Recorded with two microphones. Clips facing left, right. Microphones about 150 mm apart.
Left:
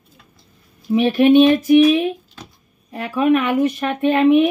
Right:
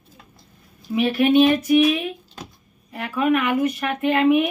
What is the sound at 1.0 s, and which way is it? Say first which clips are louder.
Speech: left 4 dB; 30° left (ahead or behind).